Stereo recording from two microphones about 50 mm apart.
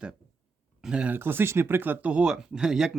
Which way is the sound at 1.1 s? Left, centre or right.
Right.